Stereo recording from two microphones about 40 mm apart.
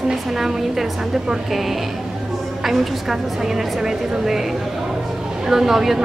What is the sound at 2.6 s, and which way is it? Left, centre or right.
Speech, centre.